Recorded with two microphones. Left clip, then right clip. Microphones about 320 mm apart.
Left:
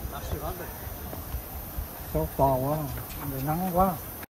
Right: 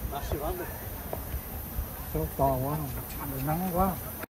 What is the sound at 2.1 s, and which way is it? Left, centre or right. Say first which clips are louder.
Speech: left 4 dB; left.